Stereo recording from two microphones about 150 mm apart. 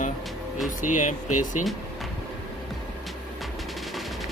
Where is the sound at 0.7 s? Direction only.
60° left (ahead or behind).